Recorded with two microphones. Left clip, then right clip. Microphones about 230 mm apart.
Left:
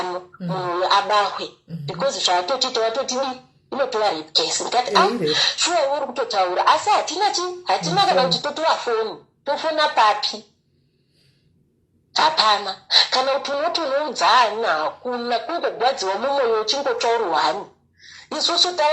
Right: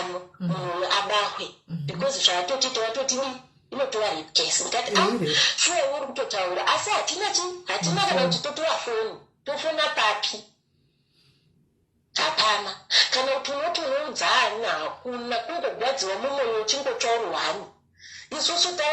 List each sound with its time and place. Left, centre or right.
0.1 s a sound: left
1.0 s speech: left
7.6 s speech: centre
7.9 s speech: left
12.1 s speech: left